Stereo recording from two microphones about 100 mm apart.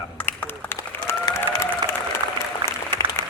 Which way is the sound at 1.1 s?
25° left (ahead or behind).